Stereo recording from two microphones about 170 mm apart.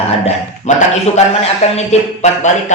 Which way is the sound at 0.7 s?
45° left (ahead or behind).